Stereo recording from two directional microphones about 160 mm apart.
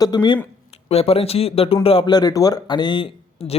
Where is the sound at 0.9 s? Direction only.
40° left (ahead or behind).